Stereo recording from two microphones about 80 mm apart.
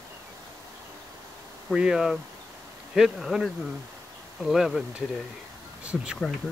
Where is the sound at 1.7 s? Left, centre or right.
Centre.